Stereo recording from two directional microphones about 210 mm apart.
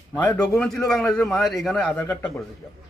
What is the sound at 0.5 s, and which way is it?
A man's voice, 10° left (ahead or behind).